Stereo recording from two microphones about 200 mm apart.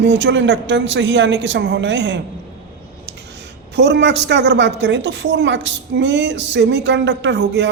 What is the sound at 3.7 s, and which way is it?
A woman's voice, 60° right (ahead or behind).